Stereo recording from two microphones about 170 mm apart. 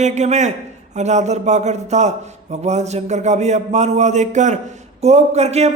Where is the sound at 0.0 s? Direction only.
45° right (ahead or behind).